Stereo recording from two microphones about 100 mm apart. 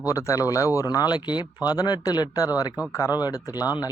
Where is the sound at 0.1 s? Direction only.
35° left (ahead or behind).